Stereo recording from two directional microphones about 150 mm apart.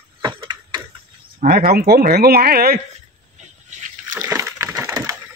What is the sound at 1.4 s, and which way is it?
Speech, 80° right.